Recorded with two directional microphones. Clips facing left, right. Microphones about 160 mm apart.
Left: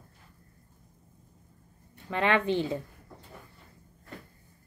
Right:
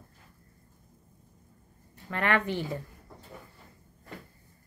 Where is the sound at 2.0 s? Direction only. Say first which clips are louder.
Left 2 dB; 20° left (ahead or behind).